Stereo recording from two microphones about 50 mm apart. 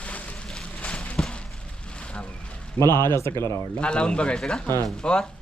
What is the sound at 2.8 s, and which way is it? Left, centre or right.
Speech, left.